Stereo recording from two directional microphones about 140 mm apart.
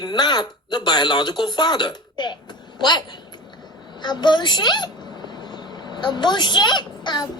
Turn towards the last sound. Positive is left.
turn(degrees=30)  # may be behind; listen again after turning